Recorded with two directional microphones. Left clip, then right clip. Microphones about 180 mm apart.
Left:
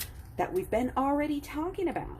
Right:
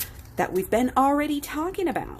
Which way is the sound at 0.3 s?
30° right (ahead or behind).